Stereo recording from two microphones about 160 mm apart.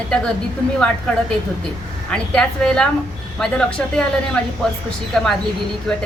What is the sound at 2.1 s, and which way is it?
A woman's voice, 5° left (ahead or behind).